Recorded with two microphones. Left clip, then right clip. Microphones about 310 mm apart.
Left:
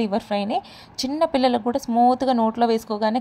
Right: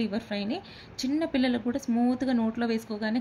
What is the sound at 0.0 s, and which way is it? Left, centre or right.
A woman's voice, left.